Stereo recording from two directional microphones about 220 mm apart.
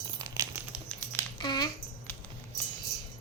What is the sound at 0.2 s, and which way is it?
Crumpling, 15° right (ahead or behind).